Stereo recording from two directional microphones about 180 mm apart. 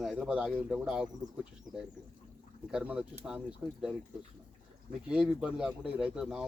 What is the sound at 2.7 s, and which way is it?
Speech, 5° right (ahead or behind).